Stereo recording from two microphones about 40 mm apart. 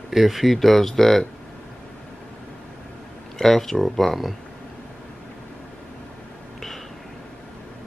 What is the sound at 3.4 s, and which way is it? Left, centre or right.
Speech, centre.